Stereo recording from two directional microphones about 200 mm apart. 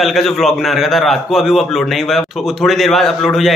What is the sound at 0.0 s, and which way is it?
Speech, centre (ahead or behind).